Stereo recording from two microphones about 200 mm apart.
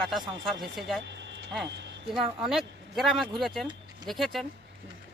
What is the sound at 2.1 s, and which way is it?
Speech, centre (ahead or behind).